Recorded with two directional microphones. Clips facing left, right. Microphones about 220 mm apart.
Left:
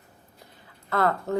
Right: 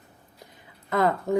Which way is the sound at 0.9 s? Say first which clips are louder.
Right 2 dB; 15° right (ahead or behind).